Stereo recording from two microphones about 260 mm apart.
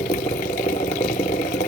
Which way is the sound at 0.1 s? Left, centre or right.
Left.